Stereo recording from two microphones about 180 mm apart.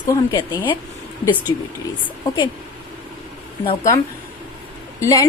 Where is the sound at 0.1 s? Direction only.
20° left (ahead or behind).